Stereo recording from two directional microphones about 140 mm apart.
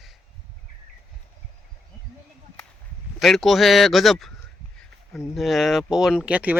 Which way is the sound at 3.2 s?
Centre (ahead or behind).